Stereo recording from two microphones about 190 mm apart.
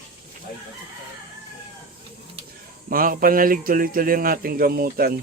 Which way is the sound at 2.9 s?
50° right (ahead or behind).